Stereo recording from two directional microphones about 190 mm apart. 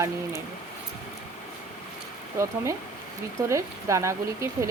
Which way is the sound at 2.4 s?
15° right (ahead or behind).